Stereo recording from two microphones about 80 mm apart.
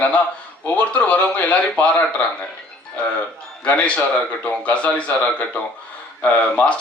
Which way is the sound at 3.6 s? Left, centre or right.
Centre.